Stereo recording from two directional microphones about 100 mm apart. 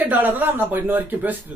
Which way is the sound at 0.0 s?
20° right (ahead or behind).